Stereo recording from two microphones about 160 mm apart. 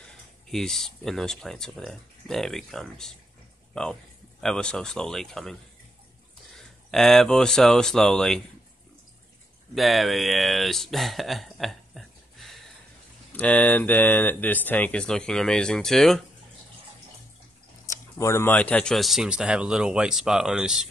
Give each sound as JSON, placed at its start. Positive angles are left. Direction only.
{"t": 0.0, "sound": "speech", "side_deg": 5}
{"t": 6.9, "sound": "speech", "side_deg": 0}
{"t": 9.8, "sound": "speech", "side_deg": 0}
{"t": 17.8, "sound": "speech", "side_deg": 15}